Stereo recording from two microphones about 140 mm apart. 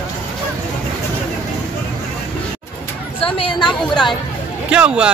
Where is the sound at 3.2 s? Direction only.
40° left (ahead or behind).